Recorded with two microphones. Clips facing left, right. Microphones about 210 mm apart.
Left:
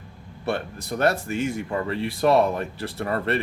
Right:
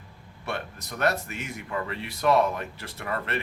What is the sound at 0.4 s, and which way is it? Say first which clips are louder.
Speech: left 7 dB; 30° left (ahead or behind).